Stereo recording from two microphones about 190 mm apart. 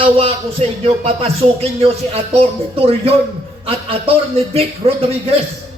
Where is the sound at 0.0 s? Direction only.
30° right (ahead or behind).